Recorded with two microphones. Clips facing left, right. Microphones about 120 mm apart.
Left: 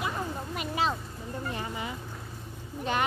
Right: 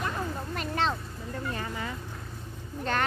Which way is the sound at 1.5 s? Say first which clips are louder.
Even; 20° left (ahead or behind).